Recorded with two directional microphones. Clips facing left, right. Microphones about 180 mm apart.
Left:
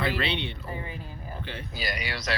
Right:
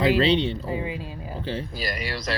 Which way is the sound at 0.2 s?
35° right (ahead or behind).